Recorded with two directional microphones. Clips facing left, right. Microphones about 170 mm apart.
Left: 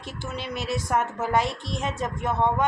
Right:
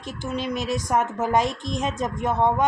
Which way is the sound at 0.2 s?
15° right (ahead or behind).